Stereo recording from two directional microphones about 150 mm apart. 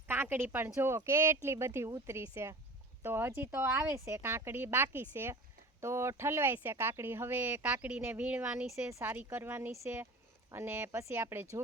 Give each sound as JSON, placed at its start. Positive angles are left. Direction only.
{"t": 0.1, "sound": "speech", "side_deg": -15}
{"t": 8.9, "sound": "speech", "side_deg": -15}